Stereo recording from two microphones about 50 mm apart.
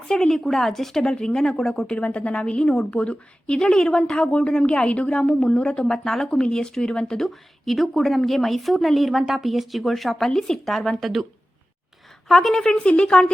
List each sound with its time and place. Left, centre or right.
0.1 s speech: centre
2.0 s a woman's voice: left; by 11.3 s centre
12.3 s a woman's voice: centre